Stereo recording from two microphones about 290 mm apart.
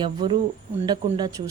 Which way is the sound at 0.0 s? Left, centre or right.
Centre.